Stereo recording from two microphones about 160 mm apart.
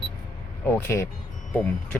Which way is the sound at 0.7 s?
15° left (ahead or behind).